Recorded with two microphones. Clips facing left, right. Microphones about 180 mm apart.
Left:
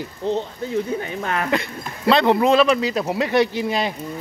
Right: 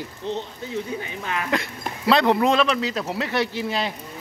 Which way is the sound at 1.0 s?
50° left (ahead or behind).